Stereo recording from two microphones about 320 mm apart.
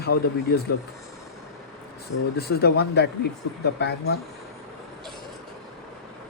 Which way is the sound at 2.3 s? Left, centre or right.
Left.